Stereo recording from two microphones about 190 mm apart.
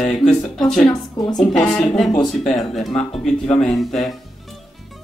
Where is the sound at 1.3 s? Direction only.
5° left (ahead or behind).